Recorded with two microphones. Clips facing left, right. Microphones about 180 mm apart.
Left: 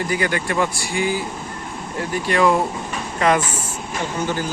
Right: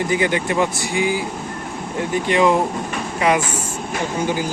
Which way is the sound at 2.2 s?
20° right (ahead or behind).